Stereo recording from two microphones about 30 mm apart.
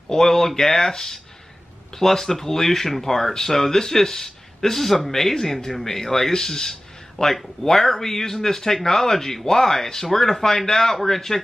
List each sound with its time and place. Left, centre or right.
0.1 s speech: centre